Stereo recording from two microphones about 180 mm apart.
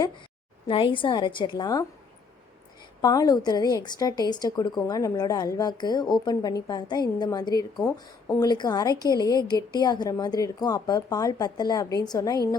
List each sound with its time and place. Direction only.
0.7 s a woman's voice: 30° left (ahead or behind)
3.0 s a woman's voice: 20° left (ahead or behind)